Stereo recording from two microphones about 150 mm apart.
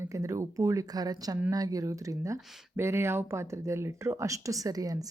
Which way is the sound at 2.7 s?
15° right (ahead or behind).